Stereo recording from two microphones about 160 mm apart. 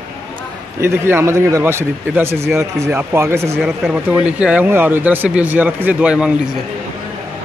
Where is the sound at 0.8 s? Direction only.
15° right (ahead or behind).